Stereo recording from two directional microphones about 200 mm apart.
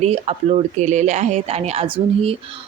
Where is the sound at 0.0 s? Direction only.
30° right (ahead or behind).